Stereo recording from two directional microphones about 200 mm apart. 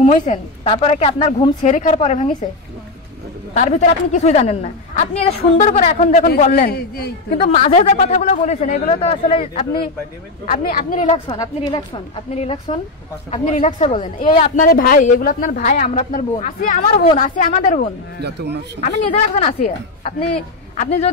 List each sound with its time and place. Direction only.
0.1 s a woman's voice: 30° left (ahead or behind)
3.5 s a woman's voice: 35° left (ahead or behind)
6.7 s a woman's voice: 50° left (ahead or behind); by 9.8 s 30° left (ahead or behind)
10.4 s a woman's voice: 45° left (ahead or behind)
11.2 s a woman's voice: 20° left (ahead or behind)
14.5 s a woman's voice: 45° left (ahead or behind)
18.2 s a man's voice: 55° right (ahead or behind)
18.8 s a woman's voice: 30° left (ahead or behind)